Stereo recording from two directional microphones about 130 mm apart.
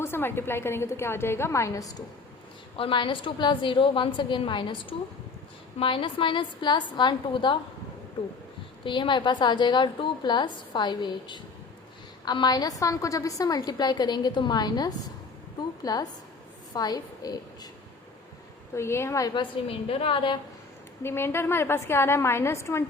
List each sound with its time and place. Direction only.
0.0 s a woman's voice: 15° left (ahead or behind)
2.7 s a woman's voice: 40° left (ahead or behind)
8.8 s a woman's voice: 40° left (ahead or behind)
18.7 s a woman's voice: 20° left (ahead or behind)
19.3 s a woman's voice: 45° left (ahead or behind)
21.0 s a woman's voice: 20° left (ahead or behind)